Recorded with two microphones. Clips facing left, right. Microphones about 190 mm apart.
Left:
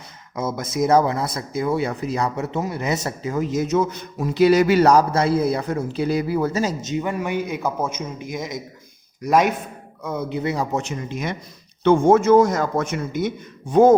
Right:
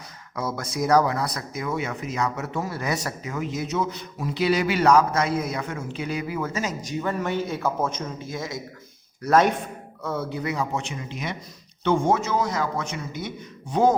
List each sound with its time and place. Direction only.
0.3 s speech: 20° left (ahead or behind)
6.8 s a man's voice: 15° left (ahead or behind); by 13.9 s 50° left (ahead or behind)